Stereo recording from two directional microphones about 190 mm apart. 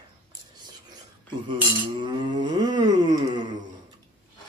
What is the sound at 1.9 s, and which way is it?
A man's voice, 25° right (ahead or behind).